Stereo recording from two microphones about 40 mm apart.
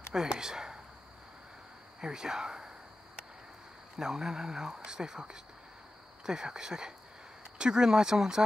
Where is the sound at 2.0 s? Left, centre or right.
Centre.